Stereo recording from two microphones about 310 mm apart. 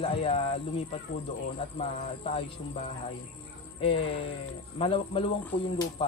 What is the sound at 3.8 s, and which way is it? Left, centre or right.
A man's voice, centre.